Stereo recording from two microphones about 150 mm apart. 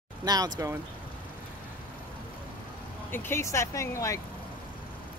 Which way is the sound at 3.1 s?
15° left (ahead or behind).